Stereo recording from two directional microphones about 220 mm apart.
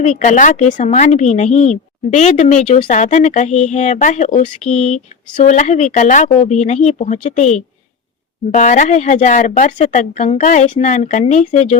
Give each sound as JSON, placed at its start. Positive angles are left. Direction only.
{"t": 0.0, "sound": "a woman's voice", "side_deg": 35}